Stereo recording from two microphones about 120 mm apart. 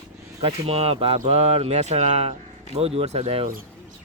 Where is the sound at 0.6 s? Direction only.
55° right (ahead or behind).